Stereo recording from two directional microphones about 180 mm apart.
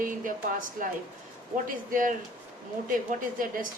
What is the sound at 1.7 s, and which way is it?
Speech, 50° right (ahead or behind).